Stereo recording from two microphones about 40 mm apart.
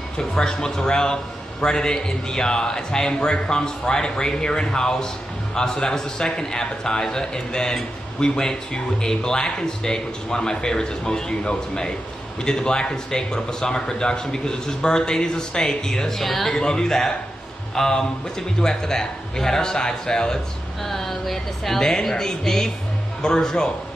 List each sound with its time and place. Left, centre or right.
0.2 s a man's voice: centre
16.5 s a man's voice: centre
20.9 s a woman's voice: centre